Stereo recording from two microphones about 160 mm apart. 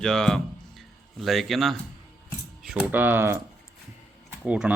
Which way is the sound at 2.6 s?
5° right (ahead or behind).